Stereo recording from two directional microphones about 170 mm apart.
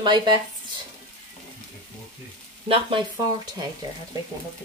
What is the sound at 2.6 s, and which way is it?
Speech, 30° right (ahead or behind).